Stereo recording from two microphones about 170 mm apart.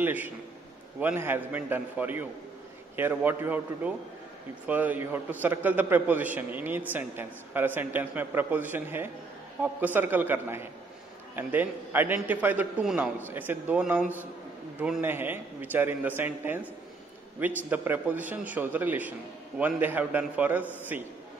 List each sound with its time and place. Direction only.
0.0 s a man's voice: 10° right (ahead or behind)
17.6 s a man's voice: 10° right (ahead or behind)